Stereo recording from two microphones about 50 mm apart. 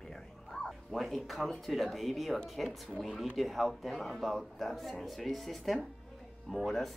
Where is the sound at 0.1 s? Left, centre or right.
Centre.